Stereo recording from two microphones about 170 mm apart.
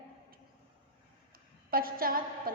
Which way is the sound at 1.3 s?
60° right (ahead or behind).